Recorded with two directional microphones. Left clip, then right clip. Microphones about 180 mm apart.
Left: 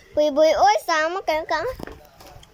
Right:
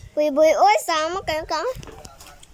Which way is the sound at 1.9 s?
55° left (ahead or behind).